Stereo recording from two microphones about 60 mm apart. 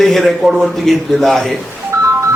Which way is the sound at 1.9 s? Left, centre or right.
Right.